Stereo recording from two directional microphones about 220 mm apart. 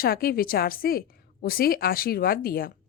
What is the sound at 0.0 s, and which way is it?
A woman's voice, 40° left (ahead or behind).